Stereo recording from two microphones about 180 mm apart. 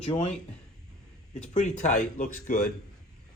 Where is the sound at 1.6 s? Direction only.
40° left (ahead or behind).